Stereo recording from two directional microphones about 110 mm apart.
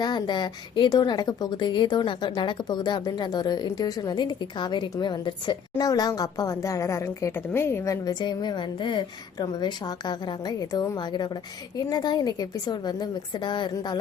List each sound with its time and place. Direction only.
0.0 s a woman's voice: 40° left (ahead or behind); by 7.9 s 25° left (ahead or behind)
8.0 s a woman's voice: 40° left (ahead or behind)